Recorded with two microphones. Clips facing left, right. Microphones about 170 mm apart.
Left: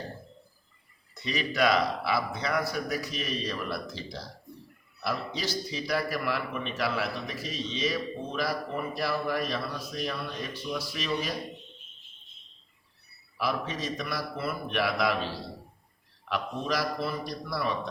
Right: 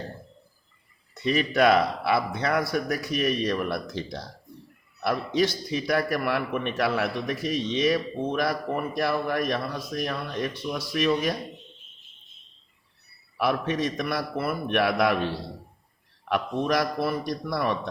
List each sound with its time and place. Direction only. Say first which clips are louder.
1.2 s a man's voice: right 6 dB; 55° right (ahead or behind)
13.3 s a man's voice: right 6 dB; 60° right (ahead or behind)